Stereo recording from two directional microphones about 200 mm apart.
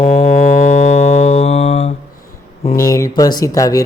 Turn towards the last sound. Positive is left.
turn(degrees=20)  # may be behind; listen again after turning